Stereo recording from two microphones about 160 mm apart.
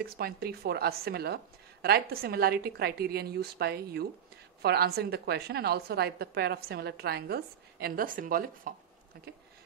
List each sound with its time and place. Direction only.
0.0 s a woman's voice: 75° right (ahead or behind)